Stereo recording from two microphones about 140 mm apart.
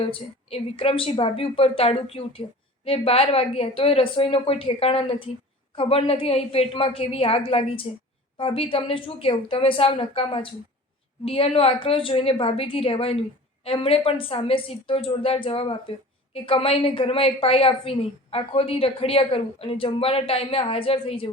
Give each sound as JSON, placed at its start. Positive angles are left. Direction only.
{"t": 0.1, "sound": "a woman's voice", "side_deg": 40}